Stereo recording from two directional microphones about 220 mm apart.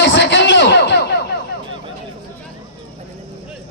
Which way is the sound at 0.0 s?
55° left (ahead or behind).